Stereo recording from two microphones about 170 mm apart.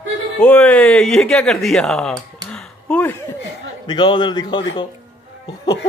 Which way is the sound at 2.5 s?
10° left (ahead or behind).